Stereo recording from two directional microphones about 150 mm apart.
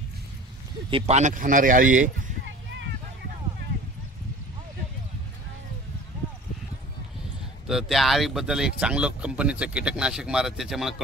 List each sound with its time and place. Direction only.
0.8 s speech: 35° right (ahead or behind)
1.1 s speech: 55° right (ahead or behind)
7.6 s speech: centre (ahead or behind)